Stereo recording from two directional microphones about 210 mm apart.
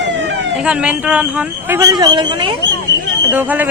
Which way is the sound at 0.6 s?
5° right (ahead or behind).